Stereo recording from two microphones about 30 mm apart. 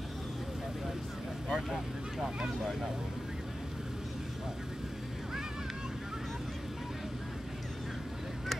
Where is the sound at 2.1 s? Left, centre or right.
Centre.